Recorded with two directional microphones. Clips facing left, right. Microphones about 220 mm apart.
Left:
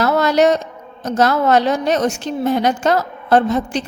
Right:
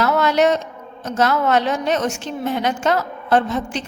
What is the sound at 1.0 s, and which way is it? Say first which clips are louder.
A woman's voice: left 3 dB; 40° left (ahead or behind).